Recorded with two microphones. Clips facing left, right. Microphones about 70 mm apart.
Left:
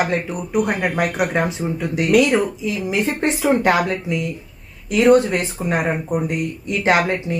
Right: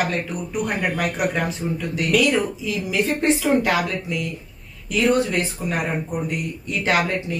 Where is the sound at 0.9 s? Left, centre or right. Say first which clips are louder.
Left 3 dB; left.